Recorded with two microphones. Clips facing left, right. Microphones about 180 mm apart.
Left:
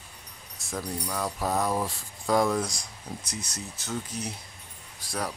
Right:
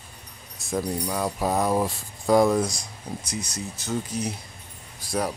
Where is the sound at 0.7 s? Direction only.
20° right (ahead or behind).